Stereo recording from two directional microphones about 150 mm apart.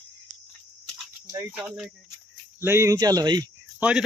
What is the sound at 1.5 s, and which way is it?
Speech, 5° right (ahead or behind).